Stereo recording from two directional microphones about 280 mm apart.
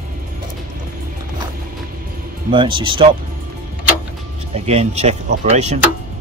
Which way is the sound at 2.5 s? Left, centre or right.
Centre.